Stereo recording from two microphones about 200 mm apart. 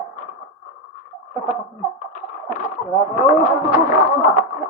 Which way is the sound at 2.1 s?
40° left (ahead or behind).